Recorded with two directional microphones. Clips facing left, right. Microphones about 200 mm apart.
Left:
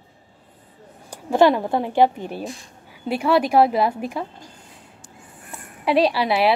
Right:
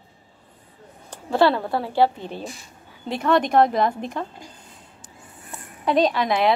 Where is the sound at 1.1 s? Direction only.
15° left (ahead or behind).